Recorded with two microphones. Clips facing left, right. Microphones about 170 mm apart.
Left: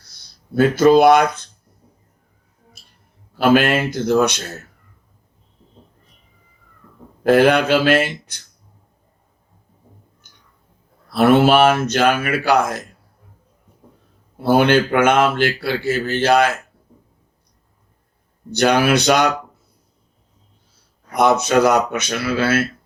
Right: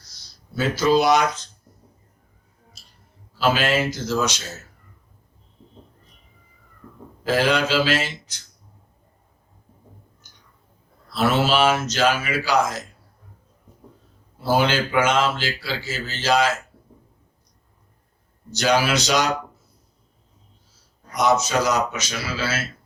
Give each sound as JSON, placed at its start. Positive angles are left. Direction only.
{"t": 0.5, "sound": "speech", "side_deg": 55}
{"t": 2.8, "sound": "clicking", "side_deg": 55}
{"t": 3.3, "sound": "speech", "side_deg": 55}
{"t": 7.3, "sound": "speech", "side_deg": 60}
{"t": 11.1, "sound": "speech", "side_deg": 55}
{"t": 14.3, "sound": "speech", "side_deg": 60}
{"t": 18.5, "sound": "speech", "side_deg": 55}
{"t": 21.1, "sound": "speech", "side_deg": 60}